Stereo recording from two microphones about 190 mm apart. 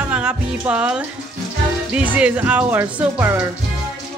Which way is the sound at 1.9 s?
5° right (ahead or behind).